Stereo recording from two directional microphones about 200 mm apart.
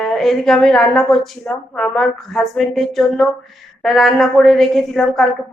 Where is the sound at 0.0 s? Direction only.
Centre (ahead or behind).